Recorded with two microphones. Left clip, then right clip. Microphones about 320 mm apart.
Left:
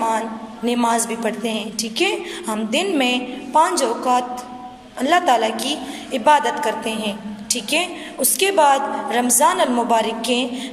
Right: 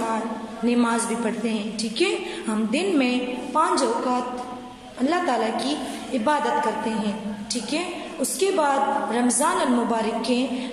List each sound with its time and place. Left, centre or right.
0.7 s a woman's voice: left